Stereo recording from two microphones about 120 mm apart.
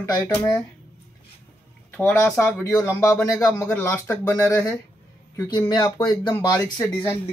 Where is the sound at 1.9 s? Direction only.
15° left (ahead or behind).